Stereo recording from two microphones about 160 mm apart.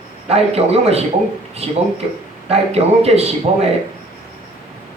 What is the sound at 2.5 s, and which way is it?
Speech, 40° right (ahead or behind).